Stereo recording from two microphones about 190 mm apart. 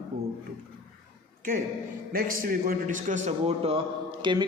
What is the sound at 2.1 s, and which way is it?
A man's voice, 50° right (ahead or behind).